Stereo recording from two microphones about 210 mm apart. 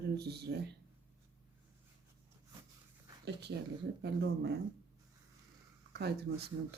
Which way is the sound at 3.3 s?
55° right (ahead or behind).